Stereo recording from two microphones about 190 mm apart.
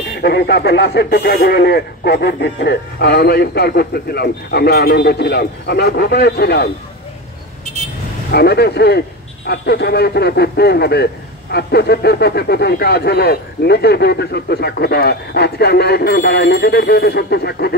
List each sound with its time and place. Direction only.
0.1 s speech: 60° left (ahead or behind)
8.3 s speech: 60° left (ahead or behind)